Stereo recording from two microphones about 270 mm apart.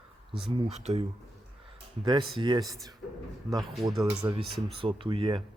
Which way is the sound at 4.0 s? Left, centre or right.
Centre.